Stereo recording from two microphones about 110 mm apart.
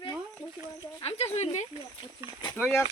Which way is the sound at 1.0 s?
70° left (ahead or behind).